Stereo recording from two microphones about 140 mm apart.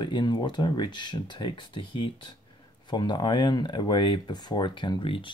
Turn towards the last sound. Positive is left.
turn(degrees=35)  # may be behind; listen again after turning